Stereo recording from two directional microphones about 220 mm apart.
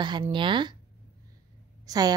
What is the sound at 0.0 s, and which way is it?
Speech, 20° right (ahead or behind).